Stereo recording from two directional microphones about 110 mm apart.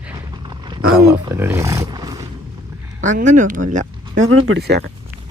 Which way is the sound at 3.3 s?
90° right.